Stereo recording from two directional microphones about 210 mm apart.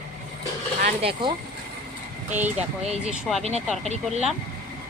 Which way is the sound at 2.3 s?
10° right (ahead or behind).